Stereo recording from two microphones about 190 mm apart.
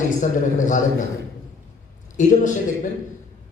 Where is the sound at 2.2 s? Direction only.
40° left (ahead or behind).